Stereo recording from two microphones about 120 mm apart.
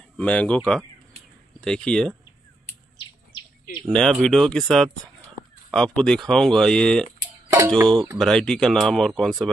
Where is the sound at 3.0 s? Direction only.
40° left (ahead or behind).